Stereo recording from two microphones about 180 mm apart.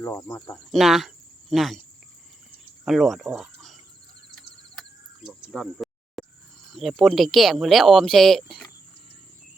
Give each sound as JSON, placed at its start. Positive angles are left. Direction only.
{"t": 0.0, "sound": "speech", "side_deg": 15}
{"t": 0.7, "sound": "speech", "side_deg": 0}
{"t": 2.8, "sound": "speech", "side_deg": 0}
{"t": 5.5, "sound": "a sound", "side_deg": 0}
{"t": 6.7, "sound": "speech", "side_deg": 0}